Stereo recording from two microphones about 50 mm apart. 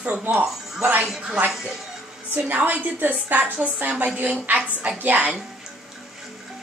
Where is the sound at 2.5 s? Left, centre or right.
Right.